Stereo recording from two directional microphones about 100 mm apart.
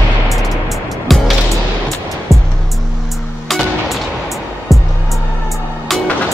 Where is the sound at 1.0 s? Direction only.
Centre (ahead or behind).